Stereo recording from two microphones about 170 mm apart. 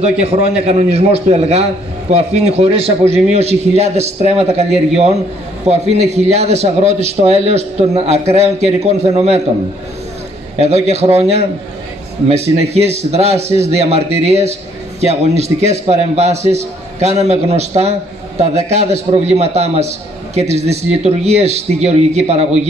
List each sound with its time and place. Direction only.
0.2 s a man's voice: 40° right (ahead or behind)
10.6 s a man's voice: 40° right (ahead or behind)